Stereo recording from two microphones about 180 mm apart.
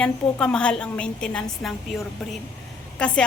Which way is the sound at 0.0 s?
5° left (ahead or behind).